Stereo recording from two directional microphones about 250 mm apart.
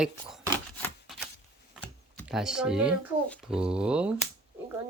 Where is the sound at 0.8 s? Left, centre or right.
Centre.